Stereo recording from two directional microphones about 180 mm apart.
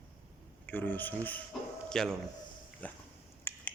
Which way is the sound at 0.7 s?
10° left (ahead or behind).